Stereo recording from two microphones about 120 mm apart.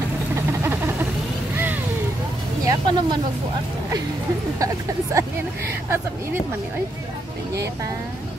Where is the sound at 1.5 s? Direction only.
15° right (ahead or behind).